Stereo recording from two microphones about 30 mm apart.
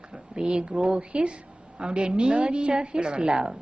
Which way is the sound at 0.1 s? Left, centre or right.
Right.